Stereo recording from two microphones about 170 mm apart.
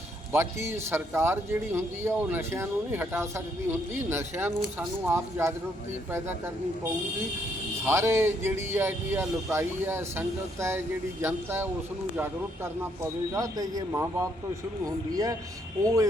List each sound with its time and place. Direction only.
0.3 s speech: 15° right (ahead or behind)
7.9 s speech: 15° right (ahead or behind)
13.3 s speech: 20° right (ahead or behind)